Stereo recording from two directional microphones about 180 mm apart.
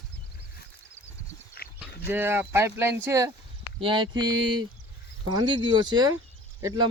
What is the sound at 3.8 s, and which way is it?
Speech, 25° right (ahead or behind).